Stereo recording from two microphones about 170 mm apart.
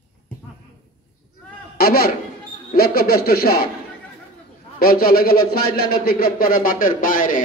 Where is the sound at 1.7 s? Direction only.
65° left (ahead or behind).